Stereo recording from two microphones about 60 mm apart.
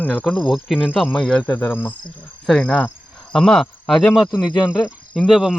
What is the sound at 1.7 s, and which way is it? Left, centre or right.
Cricket, left.